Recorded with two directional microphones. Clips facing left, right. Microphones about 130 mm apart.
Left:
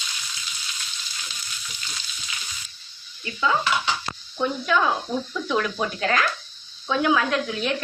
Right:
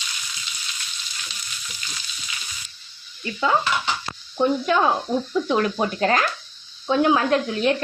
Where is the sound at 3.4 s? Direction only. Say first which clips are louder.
Right 1 dB; 45° right (ahead or behind).